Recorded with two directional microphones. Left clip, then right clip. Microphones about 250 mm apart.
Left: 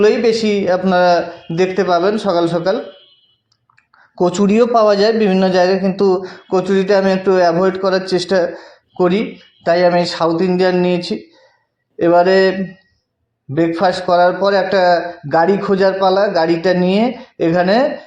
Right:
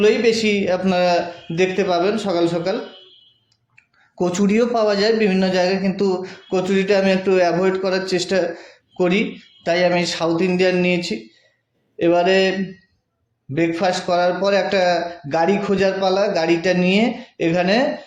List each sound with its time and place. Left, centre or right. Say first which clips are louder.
0.0 s a man's voice: left 3 dB; centre
4.1 s a man's voice: left 5 dB; centre
13.7 s a man's voice: left 7 dB; centre